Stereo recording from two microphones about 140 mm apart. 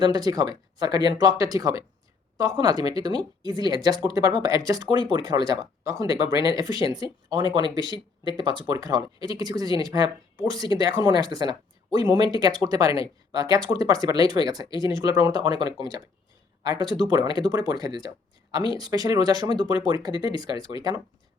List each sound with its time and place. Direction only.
0.0 s speech: 30° right (ahead or behind)